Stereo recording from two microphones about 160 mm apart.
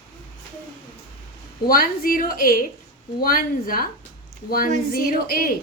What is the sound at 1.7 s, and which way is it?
A woman's voice, 65° left (ahead or behind).